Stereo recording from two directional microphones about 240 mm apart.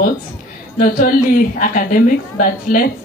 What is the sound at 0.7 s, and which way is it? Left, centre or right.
A woman's voice, left.